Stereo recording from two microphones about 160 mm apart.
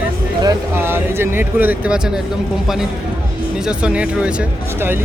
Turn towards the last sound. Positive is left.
turn(degrees=-10)  # may be behind; listen again after turning